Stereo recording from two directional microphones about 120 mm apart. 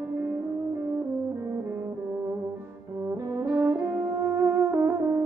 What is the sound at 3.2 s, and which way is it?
Brass instrument, 25° right (ahead or behind).